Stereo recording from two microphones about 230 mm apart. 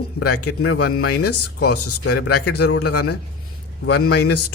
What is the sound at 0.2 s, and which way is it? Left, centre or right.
A man's voice, left.